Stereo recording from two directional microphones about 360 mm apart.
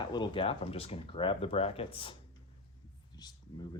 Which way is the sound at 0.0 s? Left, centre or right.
Centre.